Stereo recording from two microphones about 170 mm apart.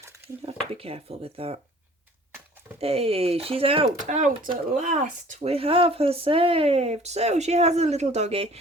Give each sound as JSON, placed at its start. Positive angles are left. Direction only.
{"t": 0.7, "sound": "speech", "side_deg": -35}
{"t": 2.8, "sound": "speech", "side_deg": -35}
{"t": 4.0, "sound": "speech", "side_deg": -45}